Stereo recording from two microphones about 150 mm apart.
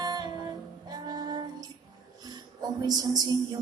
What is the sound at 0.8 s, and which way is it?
Female singing, 25° right (ahead or behind).